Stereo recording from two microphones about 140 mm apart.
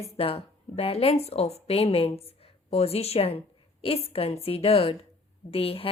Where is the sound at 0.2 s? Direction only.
45° left (ahead or behind).